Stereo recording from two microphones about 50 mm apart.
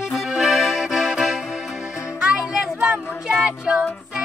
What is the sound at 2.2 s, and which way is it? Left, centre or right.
Music, centre.